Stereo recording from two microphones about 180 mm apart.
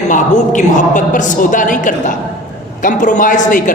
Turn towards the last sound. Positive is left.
turn(degrees=45)  # may be behind; listen again after turning